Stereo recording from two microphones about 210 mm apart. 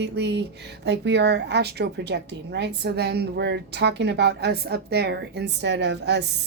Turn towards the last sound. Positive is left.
turn(degrees=-55)  # may be behind; listen again after turning